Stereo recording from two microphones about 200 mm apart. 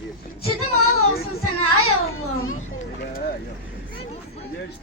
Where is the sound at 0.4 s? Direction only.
90° left.